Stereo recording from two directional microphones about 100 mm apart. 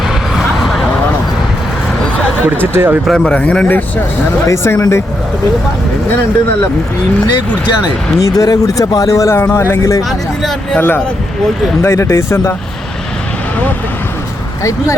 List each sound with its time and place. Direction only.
0.1 s a sound: centre (ahead or behind)
2.4 s speech: 20° right (ahead or behind)
3.1 s speech: 10° left (ahead or behind)
4.4 s speech: 25° left (ahead or behind)
8.2 s speech: 35° left (ahead or behind)
10.0 s speech: centre (ahead or behind)
10.8 s speech: 20° left (ahead or behind)
14.6 s speech: 30° left (ahead or behind)